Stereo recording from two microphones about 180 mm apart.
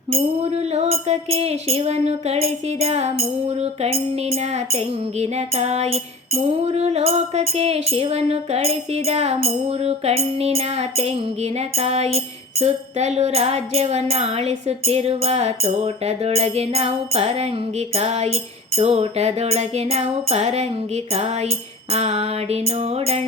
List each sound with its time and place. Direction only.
0.1 s music: 35° right (ahead or behind)
21.9 s music: 35° right (ahead or behind)